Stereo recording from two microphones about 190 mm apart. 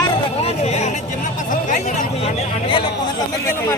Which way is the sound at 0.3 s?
35° left (ahead or behind).